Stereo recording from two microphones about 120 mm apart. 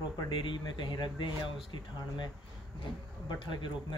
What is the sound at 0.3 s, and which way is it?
A man's voice, 40° left (ahead or behind).